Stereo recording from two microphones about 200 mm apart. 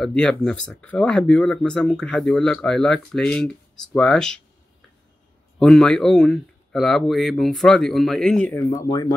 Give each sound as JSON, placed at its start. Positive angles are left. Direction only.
{"t": 0.0, "sound": "speech", "side_deg": 5}
{"t": 5.6, "sound": "speech", "side_deg": 5}
{"t": 8.6, "sound": "speech", "side_deg": 20}